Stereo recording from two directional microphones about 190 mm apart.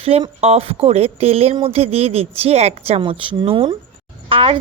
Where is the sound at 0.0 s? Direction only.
30° right (ahead or behind).